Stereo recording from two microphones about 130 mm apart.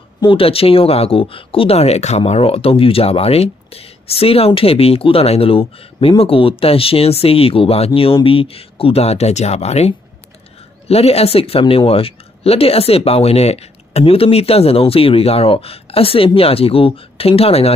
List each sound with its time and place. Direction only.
0.2 s speech: 45° left (ahead or behind)